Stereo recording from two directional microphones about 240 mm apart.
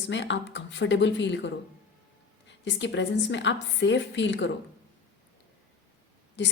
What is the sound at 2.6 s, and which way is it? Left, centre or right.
A woman's voice, left.